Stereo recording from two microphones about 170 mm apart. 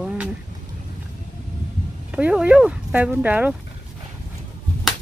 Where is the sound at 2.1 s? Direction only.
5° right (ahead or behind).